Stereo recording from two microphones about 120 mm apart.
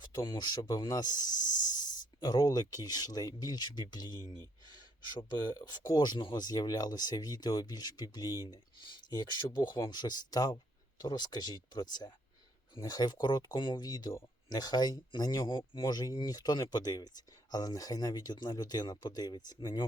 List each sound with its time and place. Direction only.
0.0 s speech: 40° left (ahead or behind)